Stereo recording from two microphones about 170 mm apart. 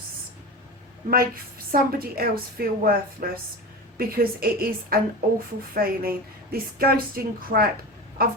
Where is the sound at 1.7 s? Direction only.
60° right (ahead or behind).